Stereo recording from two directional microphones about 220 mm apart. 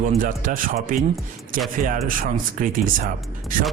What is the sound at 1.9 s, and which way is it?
A man's voice, 40° right (ahead or behind).